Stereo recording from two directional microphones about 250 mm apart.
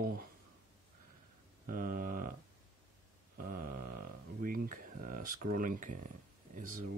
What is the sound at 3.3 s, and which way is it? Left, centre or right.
Speech, right.